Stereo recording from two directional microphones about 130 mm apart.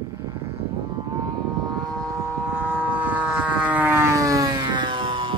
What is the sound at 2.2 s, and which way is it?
Vehicle, 15° right (ahead or behind).